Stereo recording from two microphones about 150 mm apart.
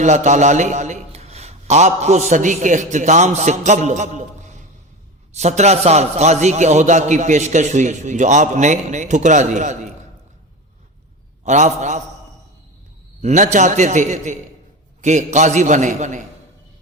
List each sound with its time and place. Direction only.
0.0 s a man's voice: 55° right (ahead or behind)
11.4 s a man's voice: 50° right (ahead or behind)
13.2 s a man's voice: 55° right (ahead or behind)